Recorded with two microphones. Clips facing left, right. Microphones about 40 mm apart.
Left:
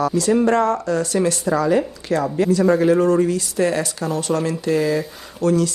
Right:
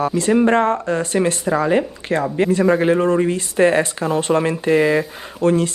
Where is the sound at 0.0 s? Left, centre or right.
Right.